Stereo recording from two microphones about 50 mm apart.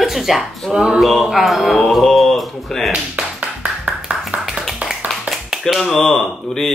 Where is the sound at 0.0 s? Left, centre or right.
Centre.